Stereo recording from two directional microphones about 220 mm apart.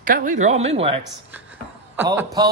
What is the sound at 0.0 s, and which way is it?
Speech, 35° right (ahead or behind).